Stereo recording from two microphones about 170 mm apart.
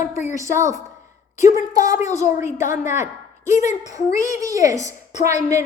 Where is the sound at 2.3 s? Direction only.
15° right (ahead or behind).